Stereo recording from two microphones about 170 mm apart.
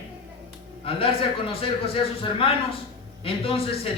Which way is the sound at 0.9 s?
30° left (ahead or behind).